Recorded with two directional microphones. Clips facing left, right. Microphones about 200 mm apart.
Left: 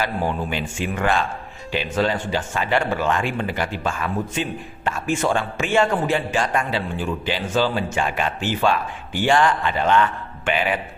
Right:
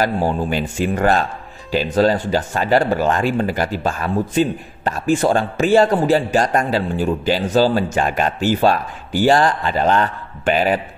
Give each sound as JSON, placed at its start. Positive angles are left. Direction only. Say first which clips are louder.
{"t": 0.0, "sound": "speech", "louder": "right 5 dB", "side_deg": -35}